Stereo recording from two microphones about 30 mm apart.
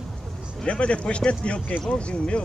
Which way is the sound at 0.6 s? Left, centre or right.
Left.